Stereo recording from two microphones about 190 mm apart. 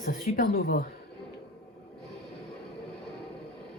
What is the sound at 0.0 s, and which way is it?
Speech, 45° left (ahead or behind).